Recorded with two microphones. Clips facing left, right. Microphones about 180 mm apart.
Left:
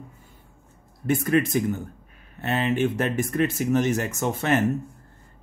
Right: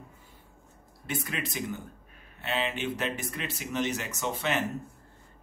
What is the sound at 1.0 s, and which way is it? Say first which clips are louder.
Speech: left 13 dB; 50° left (ahead or behind).